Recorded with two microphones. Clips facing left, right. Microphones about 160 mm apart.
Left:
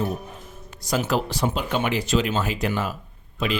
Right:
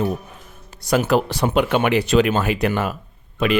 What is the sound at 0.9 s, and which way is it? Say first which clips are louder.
Speech: right 6 dB; 65° right (ahead or behind).